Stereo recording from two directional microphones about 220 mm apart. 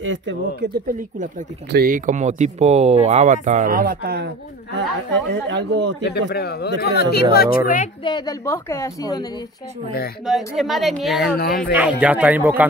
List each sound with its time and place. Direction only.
0.0 s speech: 55° right (ahead or behind)
5.3 s speech: 50° right (ahead or behind)
6.0 s speech: 45° left (ahead or behind)
8.0 s a woman's voice: 20° left (ahead or behind)
10.2 s a woman's voice: centre (ahead or behind)
11.1 s speech: 45° left (ahead or behind)
11.7 s speech: 5° right (ahead or behind)